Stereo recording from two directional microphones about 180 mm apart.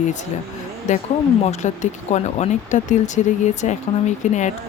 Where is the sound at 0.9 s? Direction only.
45° left (ahead or behind).